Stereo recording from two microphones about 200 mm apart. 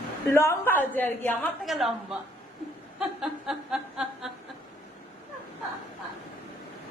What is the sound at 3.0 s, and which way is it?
Chuckle, centre (ahead or behind).